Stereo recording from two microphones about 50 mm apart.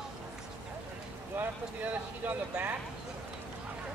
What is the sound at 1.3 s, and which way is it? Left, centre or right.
Boat, right.